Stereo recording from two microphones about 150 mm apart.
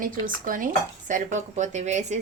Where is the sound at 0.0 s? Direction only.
65° right (ahead or behind).